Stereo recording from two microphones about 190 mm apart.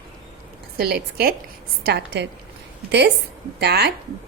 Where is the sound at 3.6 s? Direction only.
60° right (ahead or behind).